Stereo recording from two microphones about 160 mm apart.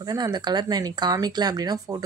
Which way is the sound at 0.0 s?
25° right (ahead or behind).